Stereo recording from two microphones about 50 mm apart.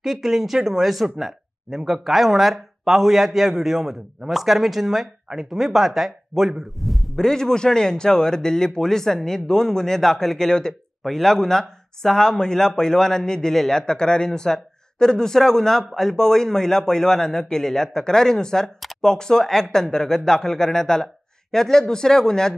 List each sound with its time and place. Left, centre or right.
0.0 s speech: centre
7.2 s a man's voice: centre